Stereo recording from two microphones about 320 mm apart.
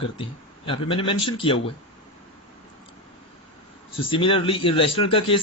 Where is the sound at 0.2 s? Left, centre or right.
Centre.